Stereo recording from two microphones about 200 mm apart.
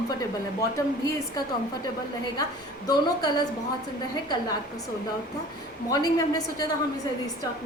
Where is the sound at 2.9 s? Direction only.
20° left (ahead or behind).